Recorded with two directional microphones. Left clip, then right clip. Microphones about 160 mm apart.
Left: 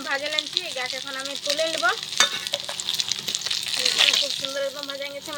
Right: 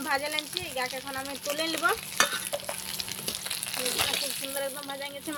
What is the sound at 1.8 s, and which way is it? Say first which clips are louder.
Speech: left 3 dB; 75° right (ahead or behind).